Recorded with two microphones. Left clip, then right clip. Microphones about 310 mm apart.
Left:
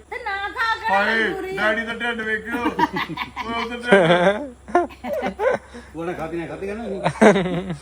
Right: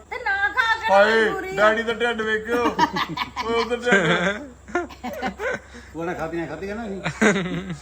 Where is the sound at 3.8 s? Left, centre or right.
Centre.